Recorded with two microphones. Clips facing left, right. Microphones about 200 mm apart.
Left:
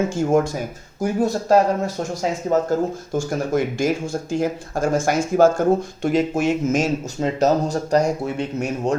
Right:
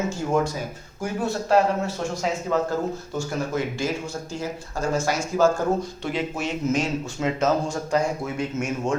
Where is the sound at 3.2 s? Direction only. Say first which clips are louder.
Left 6 dB; 50° left (ahead or behind).